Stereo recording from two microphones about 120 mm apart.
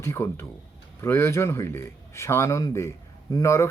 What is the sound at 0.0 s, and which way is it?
Speech, 20° left (ahead or behind).